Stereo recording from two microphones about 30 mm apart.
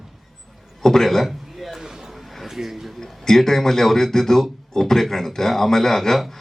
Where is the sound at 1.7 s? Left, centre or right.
Centre.